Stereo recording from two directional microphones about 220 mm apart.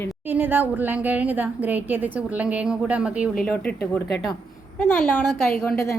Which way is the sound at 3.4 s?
5° left (ahead or behind).